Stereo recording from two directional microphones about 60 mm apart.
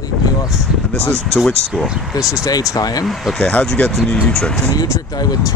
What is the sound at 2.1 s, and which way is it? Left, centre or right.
Speech, left.